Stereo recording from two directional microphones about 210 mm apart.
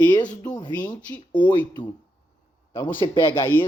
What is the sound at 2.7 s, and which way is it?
Speech, 20° left (ahead or behind).